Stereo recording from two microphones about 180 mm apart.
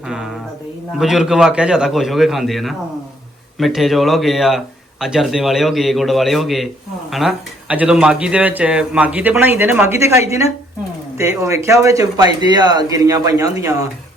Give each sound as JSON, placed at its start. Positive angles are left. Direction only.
{"t": 0.9, "sound": "a man's voice", "side_deg": 0}